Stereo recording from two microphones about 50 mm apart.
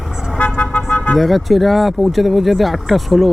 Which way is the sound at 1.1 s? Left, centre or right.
Centre.